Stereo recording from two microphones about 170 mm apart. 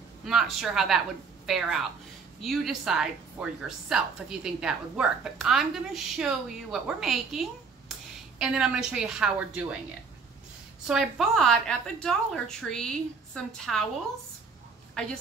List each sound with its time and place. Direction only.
0.2 s a woman's voice: centre (ahead or behind)
10.9 s a woman's voice: centre (ahead or behind)